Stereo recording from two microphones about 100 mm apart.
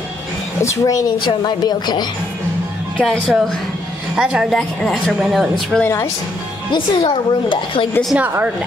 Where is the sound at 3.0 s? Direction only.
5° left (ahead or behind).